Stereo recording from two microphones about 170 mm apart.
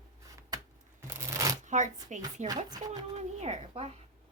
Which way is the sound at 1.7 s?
45° right (ahead or behind).